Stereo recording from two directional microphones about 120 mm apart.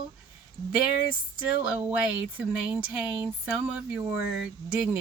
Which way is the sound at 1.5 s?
10° right (ahead or behind).